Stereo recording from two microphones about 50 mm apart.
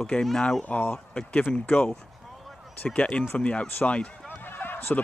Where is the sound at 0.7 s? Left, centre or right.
Left.